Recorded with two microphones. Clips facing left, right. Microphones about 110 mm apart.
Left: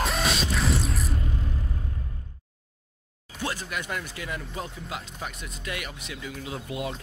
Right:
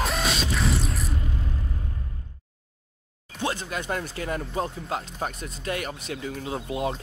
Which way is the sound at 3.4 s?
25° right (ahead or behind).